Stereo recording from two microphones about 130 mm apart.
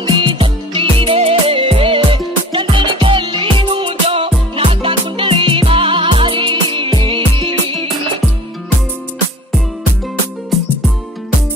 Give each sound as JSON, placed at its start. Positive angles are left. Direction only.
{"t": 0.0, "sound": "music", "side_deg": -40}
{"t": 10.5, "sound": "music", "side_deg": 0}